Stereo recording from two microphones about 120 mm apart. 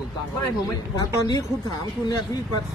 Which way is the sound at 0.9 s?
35° left (ahead or behind).